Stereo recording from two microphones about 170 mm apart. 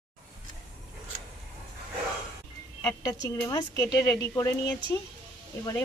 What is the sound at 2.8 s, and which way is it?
A woman's voice, 20° left (ahead or behind).